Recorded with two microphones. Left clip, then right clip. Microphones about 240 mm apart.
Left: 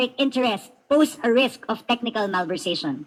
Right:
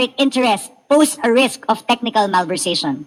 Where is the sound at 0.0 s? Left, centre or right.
Right.